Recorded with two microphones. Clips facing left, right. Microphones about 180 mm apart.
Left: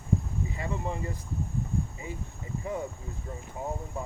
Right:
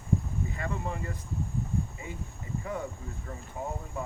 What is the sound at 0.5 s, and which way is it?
Speech, 20° left (ahead or behind).